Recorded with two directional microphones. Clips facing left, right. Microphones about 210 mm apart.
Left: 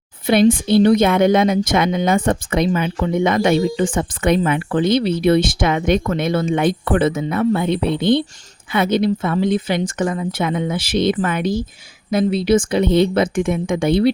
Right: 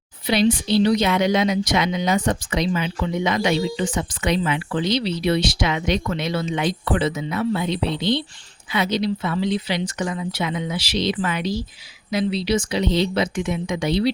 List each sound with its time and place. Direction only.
0.3 s a woman's voice: 50° left (ahead or behind)